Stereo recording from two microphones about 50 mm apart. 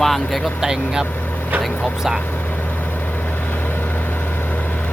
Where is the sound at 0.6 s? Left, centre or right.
Centre.